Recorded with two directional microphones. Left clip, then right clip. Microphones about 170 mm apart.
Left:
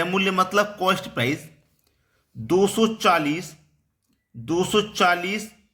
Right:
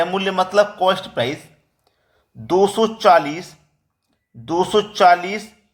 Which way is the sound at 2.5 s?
15° left (ahead or behind).